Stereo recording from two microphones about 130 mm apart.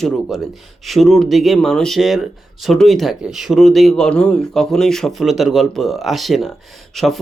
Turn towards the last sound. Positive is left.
turn(degrees=0)  # may be behind; listen again after turning